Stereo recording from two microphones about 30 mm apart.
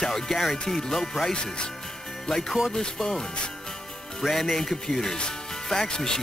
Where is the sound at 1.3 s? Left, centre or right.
Left.